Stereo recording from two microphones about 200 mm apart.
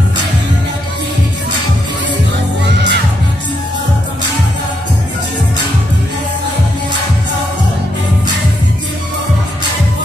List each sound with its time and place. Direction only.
2.6 s music: 60° right (ahead or behind)